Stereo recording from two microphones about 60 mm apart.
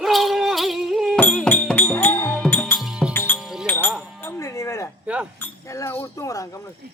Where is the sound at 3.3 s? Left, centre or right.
Centre.